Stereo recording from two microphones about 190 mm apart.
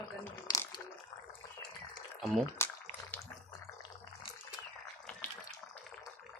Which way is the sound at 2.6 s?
15° left (ahead or behind).